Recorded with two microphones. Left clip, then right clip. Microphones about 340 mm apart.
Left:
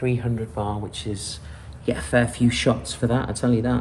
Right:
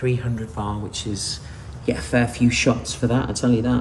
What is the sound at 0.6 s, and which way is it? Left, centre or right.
Speech, centre.